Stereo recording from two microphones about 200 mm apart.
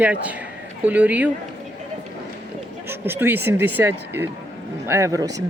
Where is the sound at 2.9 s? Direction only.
10° right (ahead or behind).